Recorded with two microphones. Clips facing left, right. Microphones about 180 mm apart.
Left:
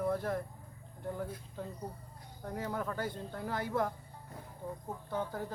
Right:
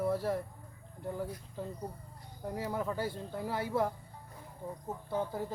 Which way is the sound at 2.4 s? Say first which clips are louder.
Right 2 dB; 10° right (ahead or behind).